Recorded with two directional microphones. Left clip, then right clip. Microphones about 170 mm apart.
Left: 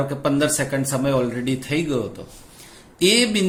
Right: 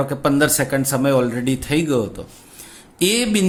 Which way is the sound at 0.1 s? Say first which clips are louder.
Right 3 dB; 40° right (ahead or behind).